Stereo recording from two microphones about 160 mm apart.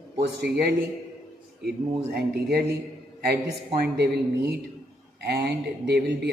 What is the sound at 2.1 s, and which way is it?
Speech, 80° right.